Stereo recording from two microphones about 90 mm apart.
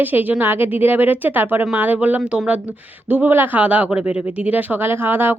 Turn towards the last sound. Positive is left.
turn(degrees=-25)  # may be behind; listen again after turning